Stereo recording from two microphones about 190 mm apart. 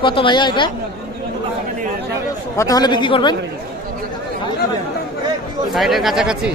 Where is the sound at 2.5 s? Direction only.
20° left (ahead or behind).